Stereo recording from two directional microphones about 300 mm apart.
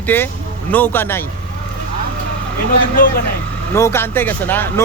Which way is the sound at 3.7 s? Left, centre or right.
Centre.